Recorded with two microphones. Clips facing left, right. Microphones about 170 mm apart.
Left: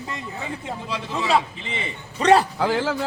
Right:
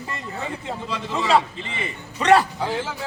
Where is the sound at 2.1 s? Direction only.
35° left (ahead or behind).